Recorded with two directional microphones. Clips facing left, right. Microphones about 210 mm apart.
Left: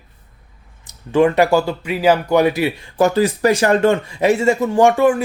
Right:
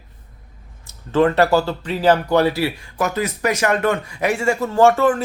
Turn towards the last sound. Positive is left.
turn(degrees=15)  # may be behind; listen again after turning